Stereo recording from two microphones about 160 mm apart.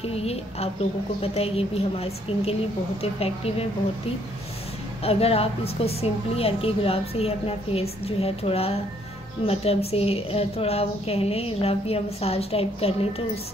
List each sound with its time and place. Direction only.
0.0 s a woman's voice: 40° left (ahead or behind)
5.0 s a woman's voice: 40° left (ahead or behind)